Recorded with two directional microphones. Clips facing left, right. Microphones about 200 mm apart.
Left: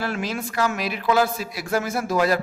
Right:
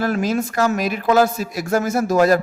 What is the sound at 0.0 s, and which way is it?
A man's voice, 45° right (ahead or behind).